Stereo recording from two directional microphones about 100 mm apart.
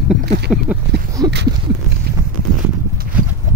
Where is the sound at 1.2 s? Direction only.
45° right (ahead or behind).